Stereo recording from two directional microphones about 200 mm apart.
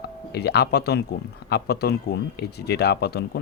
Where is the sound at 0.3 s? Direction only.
55° left (ahead or behind).